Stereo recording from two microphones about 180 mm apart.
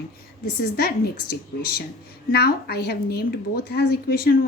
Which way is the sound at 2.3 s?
60° left (ahead or behind).